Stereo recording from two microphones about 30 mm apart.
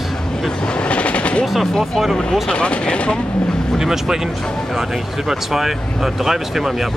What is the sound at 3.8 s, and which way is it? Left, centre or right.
Speech, centre.